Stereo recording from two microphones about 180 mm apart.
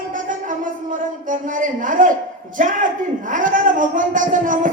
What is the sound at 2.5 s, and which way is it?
Speech, 45° right (ahead or behind).